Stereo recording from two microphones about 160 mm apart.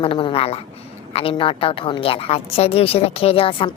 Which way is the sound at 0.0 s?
35° left (ahead or behind).